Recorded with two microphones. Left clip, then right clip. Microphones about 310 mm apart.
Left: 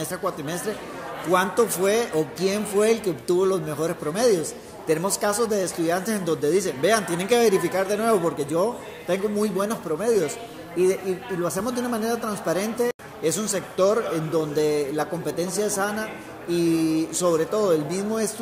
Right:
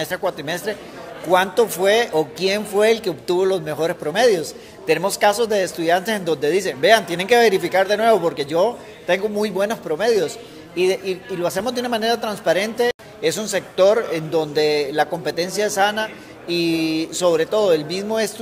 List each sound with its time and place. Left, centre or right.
0.0 s speech: right